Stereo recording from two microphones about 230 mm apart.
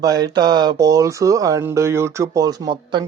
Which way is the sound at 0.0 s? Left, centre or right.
Centre.